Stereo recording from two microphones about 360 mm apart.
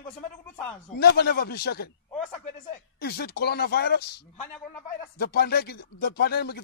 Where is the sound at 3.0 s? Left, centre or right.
Left.